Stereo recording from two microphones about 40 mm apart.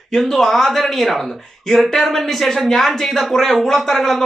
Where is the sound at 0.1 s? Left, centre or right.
Centre.